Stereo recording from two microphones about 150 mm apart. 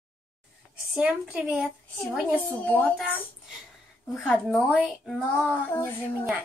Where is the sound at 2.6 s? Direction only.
10° left (ahead or behind).